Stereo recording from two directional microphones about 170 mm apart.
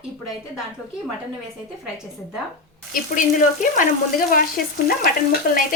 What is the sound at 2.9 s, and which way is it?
Speech, 50° left (ahead or behind).